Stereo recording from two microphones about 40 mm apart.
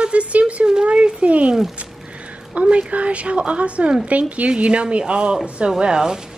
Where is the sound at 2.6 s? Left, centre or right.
Right; by 6.2 s centre.